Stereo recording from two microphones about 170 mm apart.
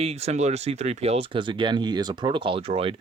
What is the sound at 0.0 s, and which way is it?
Speech, 35° right (ahead or behind).